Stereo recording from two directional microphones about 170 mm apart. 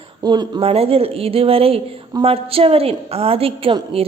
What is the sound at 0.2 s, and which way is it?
Speech, 25° right (ahead or behind).